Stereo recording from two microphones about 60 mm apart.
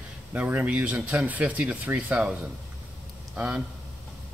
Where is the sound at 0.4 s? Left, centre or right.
Right.